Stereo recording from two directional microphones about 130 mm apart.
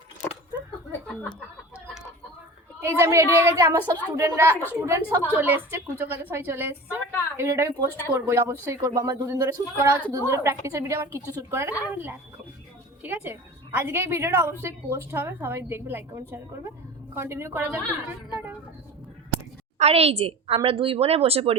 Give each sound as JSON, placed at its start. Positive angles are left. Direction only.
{"t": 2.8, "sound": "a woman's voice", "side_deg": -20}
{"t": 19.8, "sound": "speech", "side_deg": -50}